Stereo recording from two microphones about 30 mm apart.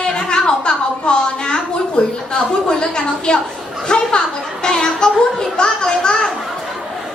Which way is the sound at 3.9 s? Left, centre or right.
Left.